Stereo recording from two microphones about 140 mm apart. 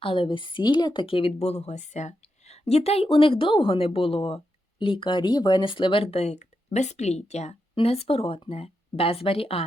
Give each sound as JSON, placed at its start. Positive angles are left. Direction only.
{"t": 0.0, "sound": "speech", "side_deg": 40}